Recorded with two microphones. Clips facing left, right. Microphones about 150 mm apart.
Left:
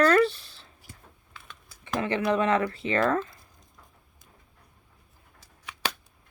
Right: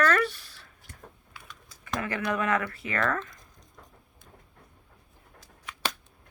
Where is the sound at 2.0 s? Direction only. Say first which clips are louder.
Left 5 dB; 25° left (ahead or behind).